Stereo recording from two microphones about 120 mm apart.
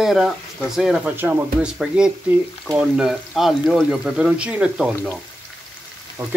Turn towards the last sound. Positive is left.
turn(degrees=-20)  # may be behind; listen again after turning